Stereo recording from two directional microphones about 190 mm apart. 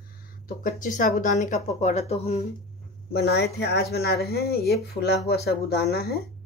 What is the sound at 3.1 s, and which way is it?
Speech, 60° left (ahead or behind).